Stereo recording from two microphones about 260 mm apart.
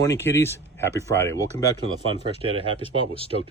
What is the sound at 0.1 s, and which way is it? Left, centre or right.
Speech, centre.